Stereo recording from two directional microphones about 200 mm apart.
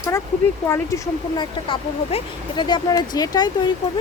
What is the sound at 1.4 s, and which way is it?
Speech, 25° left (ahead or behind).